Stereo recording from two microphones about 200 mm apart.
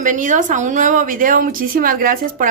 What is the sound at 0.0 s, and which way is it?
A woman's voice, 40° right (ahead or behind).